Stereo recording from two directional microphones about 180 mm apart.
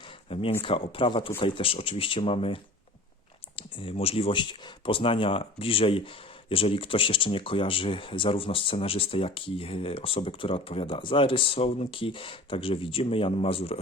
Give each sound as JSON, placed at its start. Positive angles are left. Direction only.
{"t": 0.6, "sound": "speech", "side_deg": 30}